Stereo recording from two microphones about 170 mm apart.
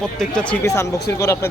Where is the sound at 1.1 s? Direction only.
15° left (ahead or behind).